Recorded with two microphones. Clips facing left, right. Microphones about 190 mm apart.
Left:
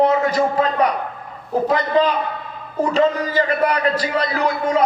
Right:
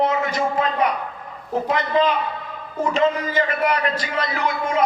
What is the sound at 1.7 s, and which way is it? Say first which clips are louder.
A man's voice: left 2 dB; 35° left (ahead or behind).